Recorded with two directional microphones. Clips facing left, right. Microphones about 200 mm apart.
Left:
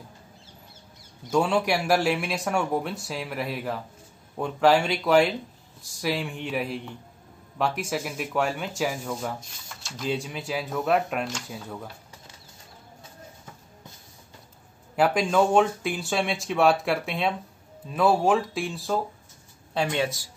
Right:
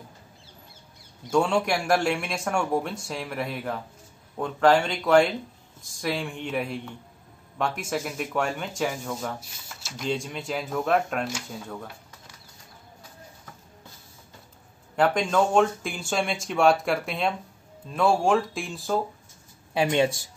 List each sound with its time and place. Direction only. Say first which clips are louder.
1.3 s speech: even; 5° left (ahead or behind)
15.0 s speech: left 1 dB; 5° left (ahead or behind)
19.7 s speech: right 4 dB; 15° right (ahead or behind)